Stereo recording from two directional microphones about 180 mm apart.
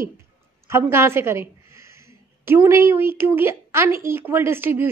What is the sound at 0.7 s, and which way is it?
A woman's voice, 15° right (ahead or behind).